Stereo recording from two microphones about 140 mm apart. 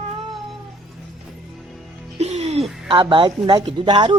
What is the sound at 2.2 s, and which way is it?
Music, 55° right (ahead or behind).